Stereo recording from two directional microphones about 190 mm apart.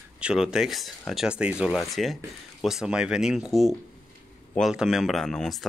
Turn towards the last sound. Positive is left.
turn(degrees=0)  # may be behind; listen again after turning